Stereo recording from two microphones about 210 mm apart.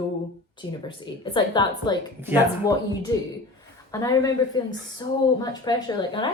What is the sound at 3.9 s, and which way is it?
A woman's voice, 15° left (ahead or behind).